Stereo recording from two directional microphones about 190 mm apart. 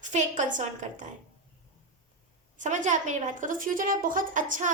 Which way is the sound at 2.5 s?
40° right (ahead or behind).